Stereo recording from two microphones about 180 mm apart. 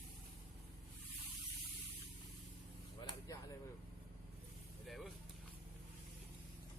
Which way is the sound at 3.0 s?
25° left (ahead or behind).